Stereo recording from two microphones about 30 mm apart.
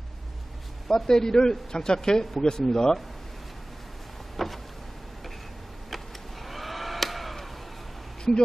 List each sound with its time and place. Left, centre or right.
0.8 s a man's voice: centre
4.4 s vehicle: centre
6.4 s a sound: centre